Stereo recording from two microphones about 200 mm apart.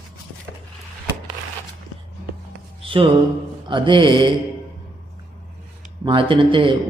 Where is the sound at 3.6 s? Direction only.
25° right (ahead or behind).